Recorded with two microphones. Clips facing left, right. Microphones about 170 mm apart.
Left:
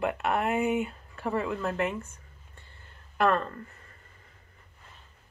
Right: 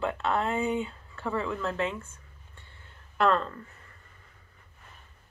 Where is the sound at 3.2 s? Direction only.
20° left (ahead or behind).